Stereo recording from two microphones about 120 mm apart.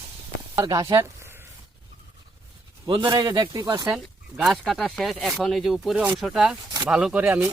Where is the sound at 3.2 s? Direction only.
30° right (ahead or behind).